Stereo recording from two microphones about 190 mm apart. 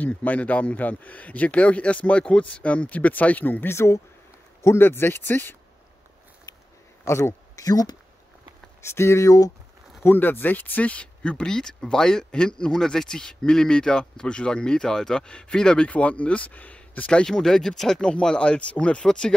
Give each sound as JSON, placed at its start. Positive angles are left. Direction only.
{"t": 0.0, "sound": "speech", "side_deg": 10}
{"t": 6.5, "sound": "a sound", "side_deg": 20}
{"t": 7.1, "sound": "speech", "side_deg": 15}